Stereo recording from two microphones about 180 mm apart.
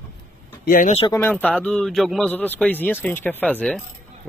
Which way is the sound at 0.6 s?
50° left (ahead or behind).